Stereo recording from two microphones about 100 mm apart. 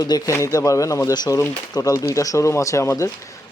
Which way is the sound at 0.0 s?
35° left (ahead or behind).